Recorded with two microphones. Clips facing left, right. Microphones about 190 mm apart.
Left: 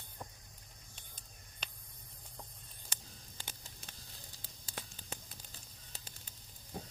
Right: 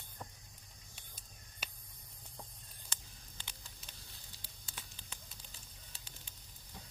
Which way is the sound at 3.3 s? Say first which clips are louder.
Left 3 dB; 45° left (ahead or behind).